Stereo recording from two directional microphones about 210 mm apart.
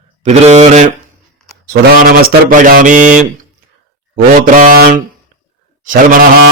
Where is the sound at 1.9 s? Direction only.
45° right (ahead or behind).